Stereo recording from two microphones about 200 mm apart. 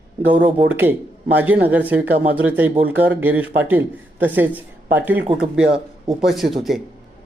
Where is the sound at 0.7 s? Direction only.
10° right (ahead or behind).